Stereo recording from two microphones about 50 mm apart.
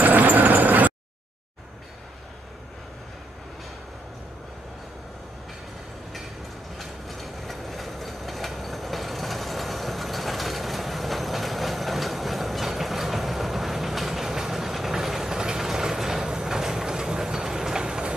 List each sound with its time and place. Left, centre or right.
0.0 s vehicle: right
6.8 s train: centre